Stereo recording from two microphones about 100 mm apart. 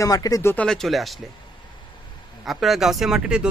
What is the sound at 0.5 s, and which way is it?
Speech, 5° left (ahead or behind).